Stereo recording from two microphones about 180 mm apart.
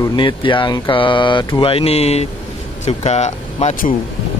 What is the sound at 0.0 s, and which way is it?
Speech, 25° left (ahead or behind).